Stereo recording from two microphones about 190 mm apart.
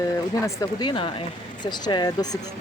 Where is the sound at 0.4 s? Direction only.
20° left (ahead or behind).